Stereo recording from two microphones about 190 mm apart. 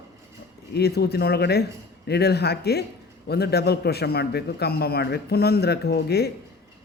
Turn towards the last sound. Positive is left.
turn(degrees=60)  # may be behind; listen again after turning